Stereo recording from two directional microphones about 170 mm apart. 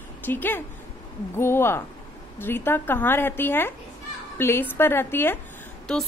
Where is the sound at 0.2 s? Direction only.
10° left (ahead or behind).